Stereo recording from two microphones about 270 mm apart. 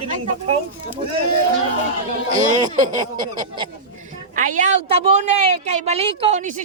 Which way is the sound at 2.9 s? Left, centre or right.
Centre.